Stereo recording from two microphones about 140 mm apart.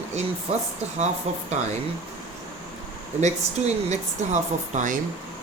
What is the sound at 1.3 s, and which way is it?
Speech, 50° right (ahead or behind).